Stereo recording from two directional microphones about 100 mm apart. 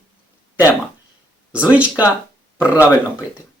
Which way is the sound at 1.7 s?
15° right (ahead or behind).